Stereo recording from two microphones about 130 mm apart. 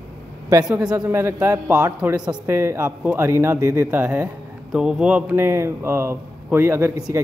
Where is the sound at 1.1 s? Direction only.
20° right (ahead or behind).